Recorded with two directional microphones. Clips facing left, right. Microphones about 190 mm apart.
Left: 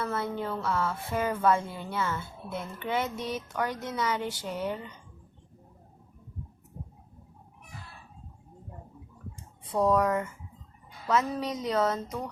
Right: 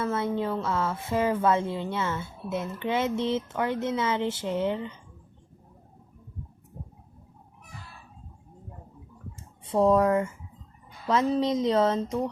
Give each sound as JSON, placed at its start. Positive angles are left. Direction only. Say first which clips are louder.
{"t": 0.0, "sound": "speech", "louder": "right 4 dB", "side_deg": -20}
{"t": 9.7, "sound": "speech", "louder": "right 4 dB", "side_deg": -25}